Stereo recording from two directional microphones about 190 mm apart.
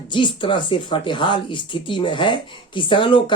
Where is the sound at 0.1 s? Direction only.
25° left (ahead or behind).